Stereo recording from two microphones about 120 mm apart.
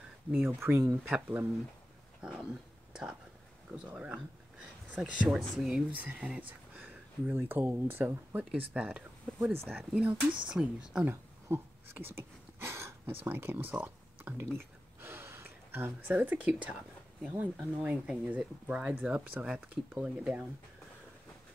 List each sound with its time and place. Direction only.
0.3 s speech: 15° right (ahead or behind)
2.2 s dog: 5° right (ahead or behind)
2.9 s whispering: 5° right (ahead or behind)
3.7 s speech: 10° right (ahead or behind)
11.1 s a sound: 20° right (ahead or behind)
13.2 s speech: 20° right (ahead or behind)
15.0 s gasp: 20° right (ahead or behind)
17.4 s speech: 10° right (ahead or behind)